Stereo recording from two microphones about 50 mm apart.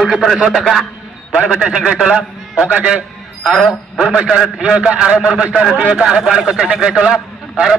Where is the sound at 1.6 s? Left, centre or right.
Centre.